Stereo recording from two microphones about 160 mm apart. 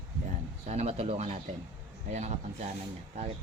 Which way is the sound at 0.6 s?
40° right (ahead or behind).